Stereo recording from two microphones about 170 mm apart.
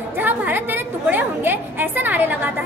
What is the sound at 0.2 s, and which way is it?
A woman's voice, 10° right (ahead or behind).